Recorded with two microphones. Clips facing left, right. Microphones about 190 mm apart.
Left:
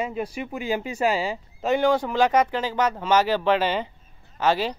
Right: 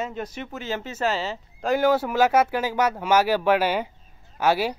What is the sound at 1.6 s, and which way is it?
Speech, 5° right (ahead or behind).